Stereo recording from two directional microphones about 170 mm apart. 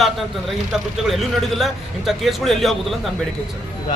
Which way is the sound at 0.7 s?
Centre (ahead or behind).